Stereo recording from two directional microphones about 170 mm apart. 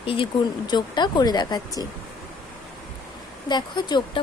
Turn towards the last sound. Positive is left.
turn(degrees=25)  # may be behind; listen again after turning